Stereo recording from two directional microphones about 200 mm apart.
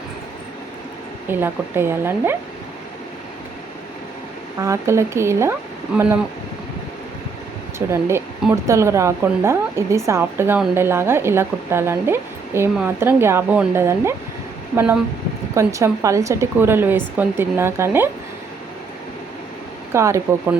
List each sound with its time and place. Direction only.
1.3 s a woman's voice: 10° right (ahead or behind)
4.6 s a woman's voice: 15° right (ahead or behind)
7.9 s a woman's voice: 10° right (ahead or behind)
19.9 s a woman's voice: 15° right (ahead or behind)